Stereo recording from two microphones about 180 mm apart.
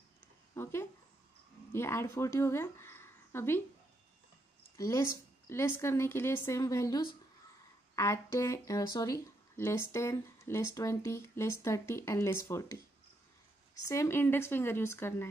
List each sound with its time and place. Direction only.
0.6 s speech: 15° left (ahead or behind)
4.7 s speech: 20° left (ahead or behind)
13.8 s speech: 15° left (ahead or behind)